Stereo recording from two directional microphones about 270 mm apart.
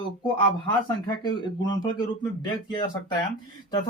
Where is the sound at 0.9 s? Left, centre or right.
Centre.